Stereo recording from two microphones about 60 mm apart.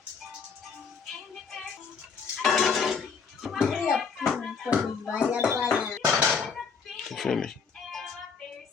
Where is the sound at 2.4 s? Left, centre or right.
Centre.